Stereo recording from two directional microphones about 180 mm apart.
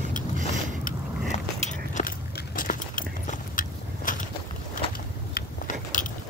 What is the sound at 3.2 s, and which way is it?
Biting, 50° left (ahead or behind).